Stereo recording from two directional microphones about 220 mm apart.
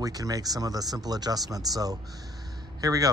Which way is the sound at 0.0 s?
15° right (ahead or behind).